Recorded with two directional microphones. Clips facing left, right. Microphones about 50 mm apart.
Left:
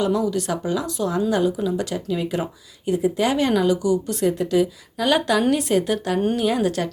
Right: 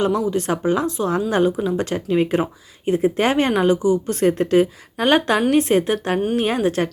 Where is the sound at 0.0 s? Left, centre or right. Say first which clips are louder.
Right 2 dB; right.